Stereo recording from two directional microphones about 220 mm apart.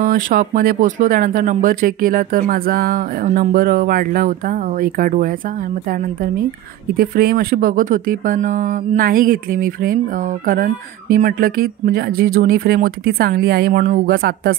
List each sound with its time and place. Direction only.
0.0 s speech: 40° right (ahead or behind)
7.0 s speech: 45° right (ahead or behind)